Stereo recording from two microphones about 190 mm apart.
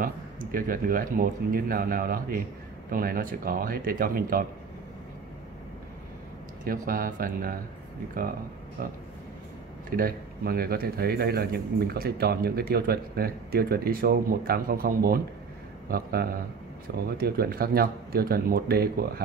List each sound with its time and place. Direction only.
0.0 s a man's voice: 45° right (ahead or behind)
6.6 s a man's voice: 50° right (ahead or behind)
9.8 s a man's voice: 50° right (ahead or behind)